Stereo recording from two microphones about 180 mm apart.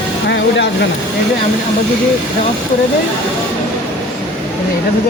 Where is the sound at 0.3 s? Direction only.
80° left.